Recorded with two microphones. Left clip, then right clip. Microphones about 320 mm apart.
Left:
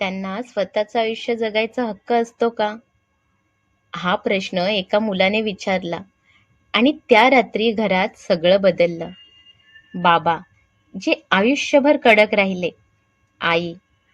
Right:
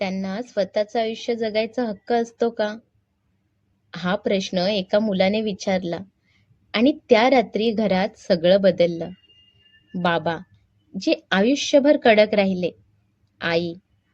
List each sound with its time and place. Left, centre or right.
0.0 s a woman's voice: left
3.9 s a woman's voice: left